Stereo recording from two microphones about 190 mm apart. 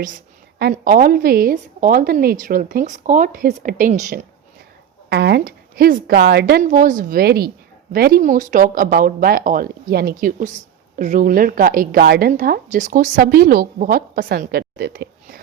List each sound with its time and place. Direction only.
0.7 s a woman's voice: 45° right (ahead or behind)
5.0 s speech: 60° right (ahead or behind)
6.6 s a woman's voice: 40° right (ahead or behind)